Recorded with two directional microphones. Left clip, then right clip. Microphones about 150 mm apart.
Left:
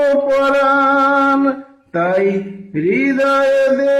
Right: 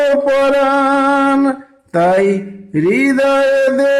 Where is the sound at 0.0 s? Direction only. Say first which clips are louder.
Right 1 dB; 30° right (ahead or behind).